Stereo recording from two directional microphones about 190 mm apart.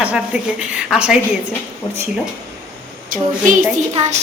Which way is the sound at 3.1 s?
45° right (ahead or behind).